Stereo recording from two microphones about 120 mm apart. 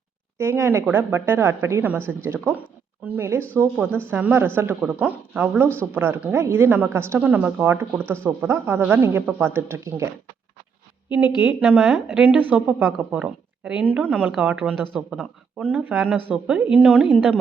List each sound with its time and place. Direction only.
0.3 s a woman's voice: 20° right (ahead or behind)
11.3 s a woman's voice: 15° right (ahead or behind)